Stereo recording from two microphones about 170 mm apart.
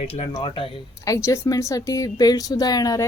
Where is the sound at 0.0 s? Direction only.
35° left (ahead or behind).